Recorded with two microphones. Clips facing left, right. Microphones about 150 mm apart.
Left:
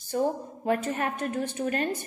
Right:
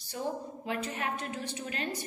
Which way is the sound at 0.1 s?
45° left (ahead or behind).